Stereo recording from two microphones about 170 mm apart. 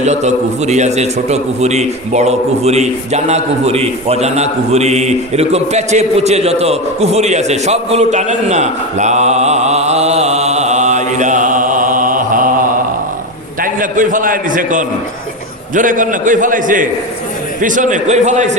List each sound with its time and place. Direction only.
0.0 s a man's voice: 40° right (ahead or behind)
13.6 s a man's voice: 50° right (ahead or behind)